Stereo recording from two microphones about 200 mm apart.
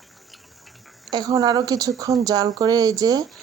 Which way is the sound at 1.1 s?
20° right (ahead or behind).